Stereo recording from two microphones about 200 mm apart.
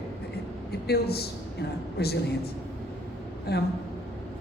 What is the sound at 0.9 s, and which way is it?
A woman's voice, 50° left (ahead or behind).